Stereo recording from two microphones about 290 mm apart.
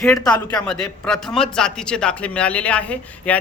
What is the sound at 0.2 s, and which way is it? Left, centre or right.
Speech, centre.